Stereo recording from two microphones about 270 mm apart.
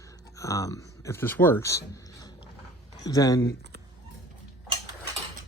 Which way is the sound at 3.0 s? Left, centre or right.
Centre.